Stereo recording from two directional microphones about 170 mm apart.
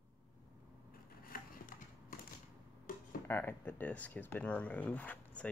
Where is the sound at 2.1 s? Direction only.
60° left (ahead or behind).